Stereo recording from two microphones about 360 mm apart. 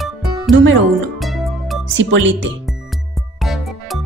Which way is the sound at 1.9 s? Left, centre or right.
Right.